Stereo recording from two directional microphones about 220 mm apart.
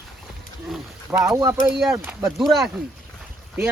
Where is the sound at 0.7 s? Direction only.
10° right (ahead or behind).